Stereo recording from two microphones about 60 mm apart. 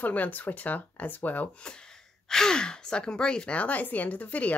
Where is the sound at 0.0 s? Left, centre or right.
Left.